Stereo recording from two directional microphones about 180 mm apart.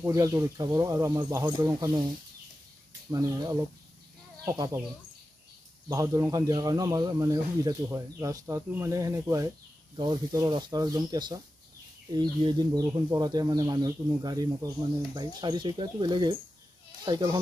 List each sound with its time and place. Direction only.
0.0 s speech: 15° right (ahead or behind)
3.1 s speech: 20° right (ahead or behind)
5.9 s speech: 20° right (ahead or behind)